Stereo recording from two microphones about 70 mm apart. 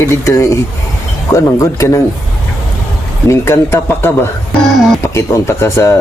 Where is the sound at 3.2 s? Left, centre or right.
Left.